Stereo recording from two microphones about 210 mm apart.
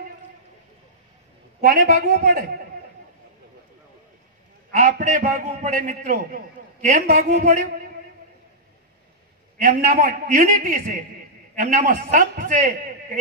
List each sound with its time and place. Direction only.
1.6 s a man's voice: 45° right (ahead or behind)
4.6 s a man's voice: 40° right (ahead or behind)
9.6 s a man's voice: 40° right (ahead or behind)